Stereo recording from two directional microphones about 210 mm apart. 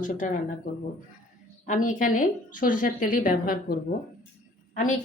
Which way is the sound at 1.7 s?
40° left (ahead or behind).